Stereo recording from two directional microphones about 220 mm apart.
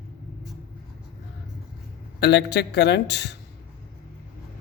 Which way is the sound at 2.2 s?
50° left (ahead or behind).